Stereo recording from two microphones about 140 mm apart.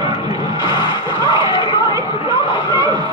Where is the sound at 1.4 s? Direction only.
35° left (ahead or behind).